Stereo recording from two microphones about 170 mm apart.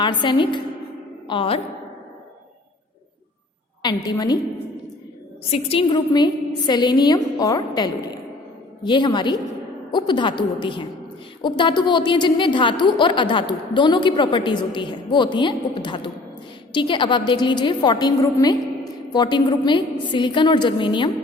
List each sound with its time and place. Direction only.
0.0 s a woman's voice: 25° left (ahead or behind)
3.8 s a woman's voice: 25° left (ahead or behind)
5.5 s a woman's voice: 35° left (ahead or behind)